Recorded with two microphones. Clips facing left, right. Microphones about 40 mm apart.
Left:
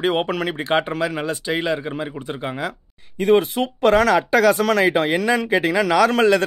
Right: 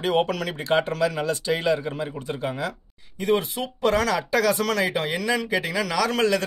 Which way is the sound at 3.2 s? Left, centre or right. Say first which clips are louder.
Left 7 dB; left.